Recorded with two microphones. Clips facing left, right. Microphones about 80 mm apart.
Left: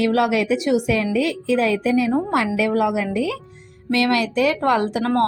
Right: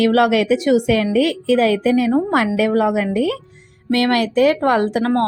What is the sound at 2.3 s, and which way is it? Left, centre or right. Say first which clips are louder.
Speech: right 3 dB; right.